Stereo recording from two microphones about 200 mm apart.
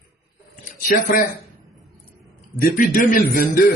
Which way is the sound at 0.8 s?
45° left (ahead or behind).